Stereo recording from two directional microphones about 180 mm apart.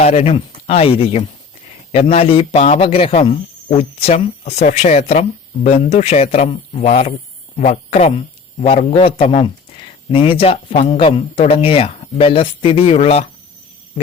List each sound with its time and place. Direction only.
0.0 s speech: 35° left (ahead or behind)